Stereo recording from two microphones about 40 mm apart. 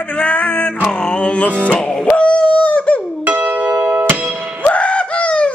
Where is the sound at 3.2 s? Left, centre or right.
Right.